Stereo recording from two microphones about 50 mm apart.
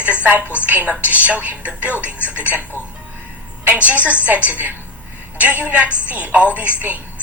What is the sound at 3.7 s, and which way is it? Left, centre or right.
A woman's voice, right.